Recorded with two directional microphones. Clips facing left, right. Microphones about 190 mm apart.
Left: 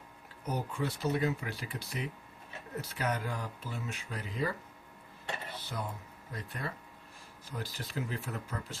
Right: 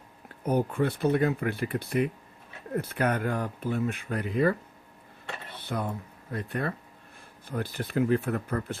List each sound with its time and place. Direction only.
0.4 s speech: 55° right (ahead or behind)
5.5 s a sound: 60° right (ahead or behind)
6.3 s speech: 60° right (ahead or behind)